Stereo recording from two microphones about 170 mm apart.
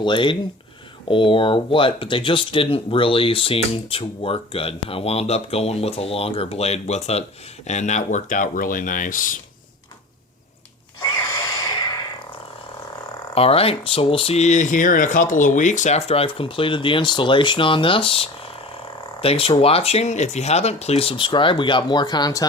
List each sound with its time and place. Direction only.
0.0 s speech: 30° left (ahead or behind); by 9.4 s 50° left (ahead or behind)
13.3 s speech: 35° left (ahead or behind)